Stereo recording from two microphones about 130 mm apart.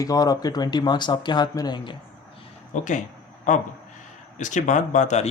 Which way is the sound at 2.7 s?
70° left (ahead or behind).